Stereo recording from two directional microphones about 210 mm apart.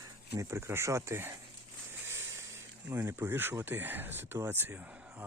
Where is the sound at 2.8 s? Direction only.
10° right (ahead or behind).